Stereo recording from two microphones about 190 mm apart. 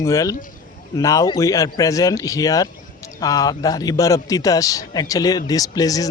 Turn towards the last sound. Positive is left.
turn(degrees=20)  # may be behind; listen again after turning